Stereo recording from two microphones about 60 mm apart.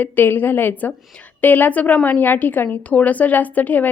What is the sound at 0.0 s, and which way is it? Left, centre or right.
A woman's voice, left.